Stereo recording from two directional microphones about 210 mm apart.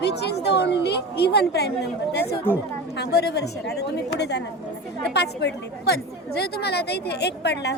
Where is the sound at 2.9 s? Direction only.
50° left (ahead or behind).